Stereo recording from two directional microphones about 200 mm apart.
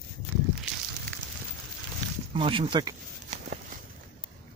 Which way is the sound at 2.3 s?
25° right (ahead or behind).